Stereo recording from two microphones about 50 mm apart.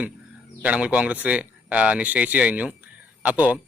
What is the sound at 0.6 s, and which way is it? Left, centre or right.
Speech, right.